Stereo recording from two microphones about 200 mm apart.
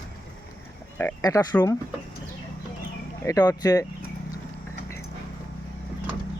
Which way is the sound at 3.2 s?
15° left (ahead or behind).